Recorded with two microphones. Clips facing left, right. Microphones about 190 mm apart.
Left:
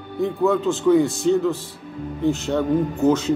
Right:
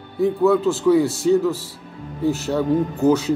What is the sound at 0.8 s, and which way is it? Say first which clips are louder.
Speech: left 2 dB; 5° right (ahead or behind).